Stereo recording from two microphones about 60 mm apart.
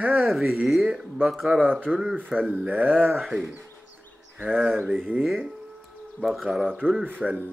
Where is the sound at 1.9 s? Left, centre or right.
Centre.